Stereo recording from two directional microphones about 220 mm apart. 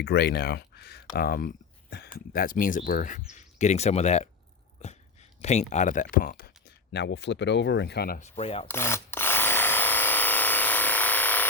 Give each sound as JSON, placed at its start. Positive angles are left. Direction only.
{"t": 0.0, "sound": "speech", "side_deg": 50}
{"t": 5.4, "sound": "speech", "side_deg": 30}
{"t": 8.2, "sound": "rub", "side_deg": 30}
{"t": 8.6, "sound": "drill", "side_deg": 10}